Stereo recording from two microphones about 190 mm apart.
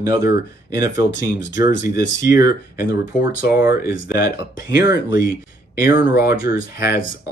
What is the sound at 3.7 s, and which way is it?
Speech, 50° left (ahead or behind).